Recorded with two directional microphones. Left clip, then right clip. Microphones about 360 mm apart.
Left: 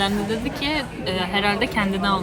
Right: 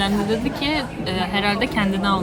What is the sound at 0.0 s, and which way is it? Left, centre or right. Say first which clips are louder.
Speech: right 2 dB; centre.